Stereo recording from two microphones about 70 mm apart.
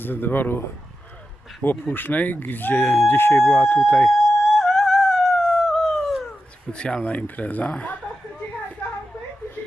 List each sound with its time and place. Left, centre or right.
0.0 s speech: left
1.6 s speech: left
4.1 s howl: centre
6.7 s speech: centre